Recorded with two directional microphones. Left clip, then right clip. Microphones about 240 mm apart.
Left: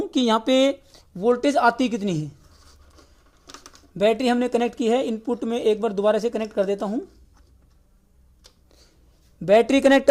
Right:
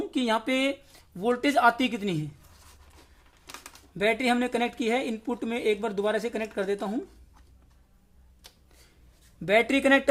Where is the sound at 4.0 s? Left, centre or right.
Centre.